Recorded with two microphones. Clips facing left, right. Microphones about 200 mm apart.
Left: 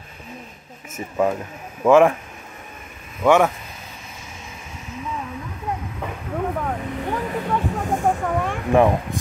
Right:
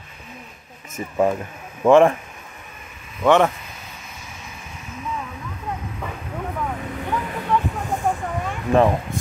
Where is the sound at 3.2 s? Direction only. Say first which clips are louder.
Even; 10° left (ahead or behind).